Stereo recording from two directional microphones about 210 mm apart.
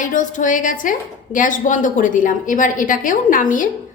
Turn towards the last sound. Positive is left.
turn(degrees=40)  # may be behind; listen again after turning